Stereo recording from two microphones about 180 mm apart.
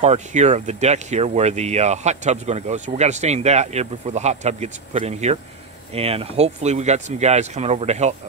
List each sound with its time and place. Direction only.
0.0 s speech: 40° right (ahead or behind)